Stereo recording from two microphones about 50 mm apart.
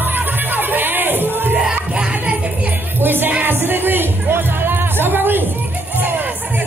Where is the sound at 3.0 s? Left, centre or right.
Right.